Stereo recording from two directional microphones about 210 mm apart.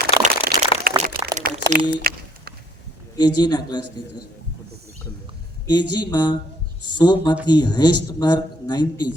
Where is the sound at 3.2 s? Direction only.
20° left (ahead or behind).